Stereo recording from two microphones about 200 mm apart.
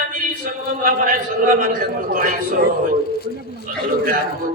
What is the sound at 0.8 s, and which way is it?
Speech, 45° right (ahead or behind).